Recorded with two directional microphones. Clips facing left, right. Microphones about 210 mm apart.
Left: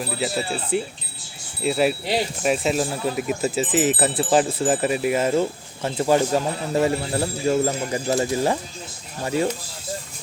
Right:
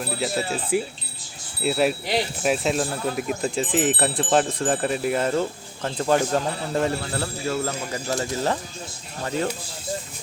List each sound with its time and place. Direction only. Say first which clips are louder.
0.0 s speech: left 1 dB; centre (ahead or behind); by 8.5 s 20° left (ahead or behind)